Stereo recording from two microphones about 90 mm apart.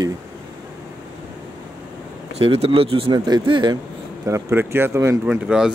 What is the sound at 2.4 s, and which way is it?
Speech, 90° right.